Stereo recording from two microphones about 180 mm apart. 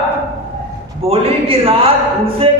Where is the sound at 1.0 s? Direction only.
30° right (ahead or behind).